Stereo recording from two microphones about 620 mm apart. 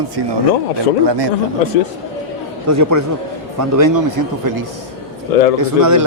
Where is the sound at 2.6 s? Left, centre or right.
Right.